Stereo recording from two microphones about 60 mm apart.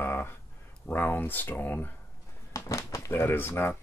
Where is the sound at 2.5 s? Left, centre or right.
Left.